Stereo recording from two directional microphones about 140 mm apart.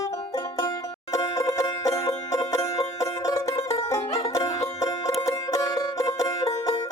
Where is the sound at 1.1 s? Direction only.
25° left (ahead or behind).